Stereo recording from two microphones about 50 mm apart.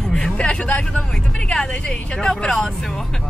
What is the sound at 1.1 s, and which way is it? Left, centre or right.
Speech, centre.